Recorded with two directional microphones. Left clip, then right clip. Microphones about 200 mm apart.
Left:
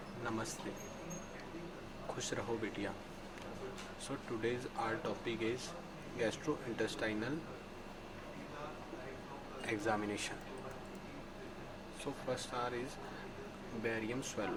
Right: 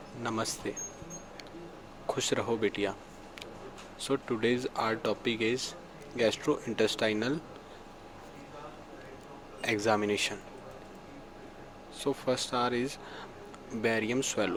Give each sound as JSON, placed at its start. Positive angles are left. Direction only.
{"t": 0.3, "sound": "speech", "side_deg": -40}
{"t": 2.1, "sound": "speech", "side_deg": -40}
{"t": 4.1, "sound": "speech", "side_deg": -40}
{"t": 9.6, "sound": "speech", "side_deg": -40}
{"t": 12.3, "sound": "speech", "side_deg": -40}
{"t": 13.8, "sound": "speech", "side_deg": -45}